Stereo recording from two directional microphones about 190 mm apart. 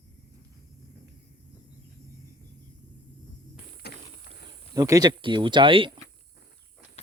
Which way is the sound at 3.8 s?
60° left (ahead or behind).